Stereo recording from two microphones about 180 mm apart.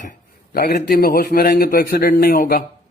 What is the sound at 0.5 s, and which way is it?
A man's voice, 55° left (ahead or behind).